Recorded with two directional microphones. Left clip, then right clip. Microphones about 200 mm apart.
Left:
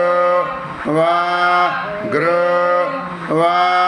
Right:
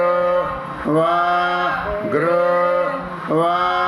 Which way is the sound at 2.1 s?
15° right (ahead or behind).